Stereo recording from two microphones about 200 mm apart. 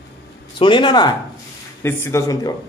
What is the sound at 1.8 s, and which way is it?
Speech, 10° left (ahead or behind).